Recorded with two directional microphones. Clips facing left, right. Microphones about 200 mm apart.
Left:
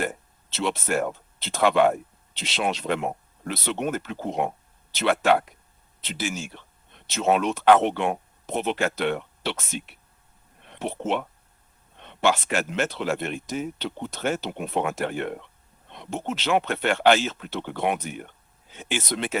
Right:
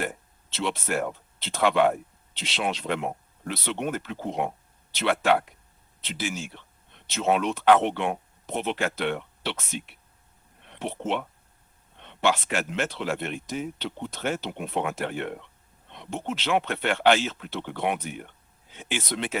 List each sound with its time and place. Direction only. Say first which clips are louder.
0.5 s speech: left 2 dB; 45° left (ahead or behind)
12.2 s speech: left 2 dB; 45° left (ahead or behind)